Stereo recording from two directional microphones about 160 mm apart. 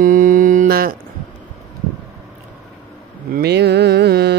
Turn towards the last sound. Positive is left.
turn(degrees=-90)